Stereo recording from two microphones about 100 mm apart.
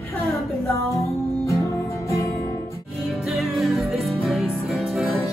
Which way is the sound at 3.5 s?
Centre (ahead or behind).